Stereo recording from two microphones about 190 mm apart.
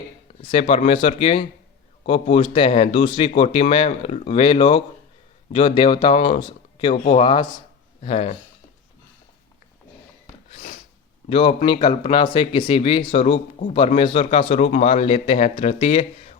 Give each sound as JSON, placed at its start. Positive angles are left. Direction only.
{"t": 0.7, "sound": "speech", "side_deg": 30}
{"t": 10.5, "sound": "a sound", "side_deg": 35}
{"t": 11.3, "sound": "speech", "side_deg": 30}